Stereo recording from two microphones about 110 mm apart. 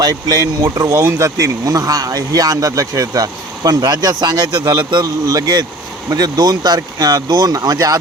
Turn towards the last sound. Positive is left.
turn(degrees=-35)  # may be behind; listen again after turning